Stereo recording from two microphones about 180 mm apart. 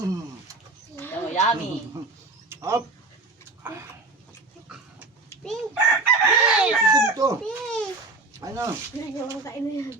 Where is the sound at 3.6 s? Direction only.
15° right (ahead or behind).